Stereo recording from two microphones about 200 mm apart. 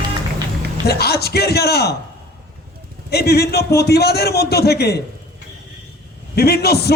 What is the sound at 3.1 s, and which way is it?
A man's voice, 55° left (ahead or behind).